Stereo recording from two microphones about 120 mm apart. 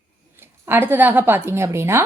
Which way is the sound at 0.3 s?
20° right (ahead or behind).